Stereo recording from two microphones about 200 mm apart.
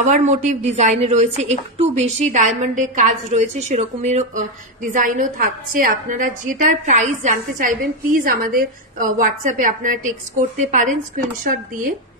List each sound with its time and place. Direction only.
0.0 s a woman's voice: 35° right (ahead or behind)
11.4 s speech: 45° right (ahead or behind)